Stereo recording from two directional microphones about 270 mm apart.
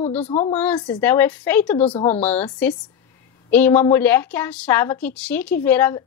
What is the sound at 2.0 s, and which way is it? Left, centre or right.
A woman's voice, centre.